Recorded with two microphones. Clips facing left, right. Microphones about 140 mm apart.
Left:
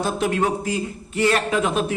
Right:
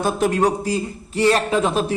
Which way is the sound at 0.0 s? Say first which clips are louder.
Right 3 dB; 40° right (ahead or behind).